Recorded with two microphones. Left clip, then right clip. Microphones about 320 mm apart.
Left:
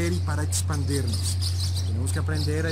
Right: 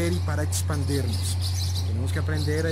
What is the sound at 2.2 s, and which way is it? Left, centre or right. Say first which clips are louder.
Speech: right 2 dB; centre.